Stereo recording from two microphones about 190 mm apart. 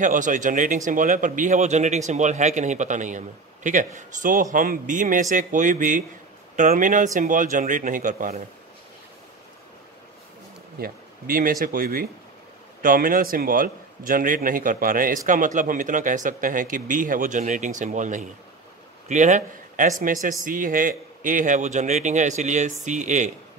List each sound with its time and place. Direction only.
0.0 s a man's voice: 40° right (ahead or behind)
10.8 s a man's voice: 50° right (ahead or behind)